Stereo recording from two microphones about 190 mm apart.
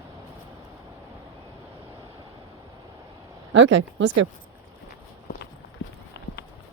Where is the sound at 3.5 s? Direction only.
75° right (ahead or behind).